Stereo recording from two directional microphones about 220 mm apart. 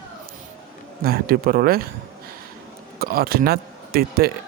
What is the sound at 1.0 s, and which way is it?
Speech, 45° right (ahead or behind).